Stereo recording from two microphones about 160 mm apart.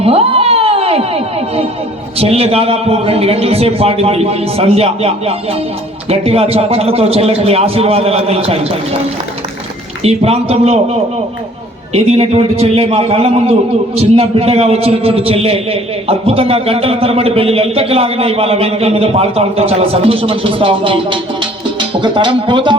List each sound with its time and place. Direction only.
0.0 s a sound: 40° right (ahead or behind)
2.1 s a man's voice: 35° right (ahead or behind)
10.0 s a man's voice: 40° right (ahead or behind)
11.9 s a man's voice: 40° right (ahead or behind)
21.8 s music: 30° right (ahead or behind)